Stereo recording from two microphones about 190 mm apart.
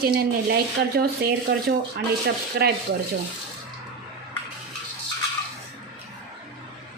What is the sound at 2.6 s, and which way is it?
Rub, 55° right (ahead or behind).